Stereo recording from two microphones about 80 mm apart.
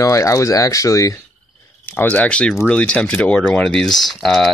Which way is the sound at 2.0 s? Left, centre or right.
Left.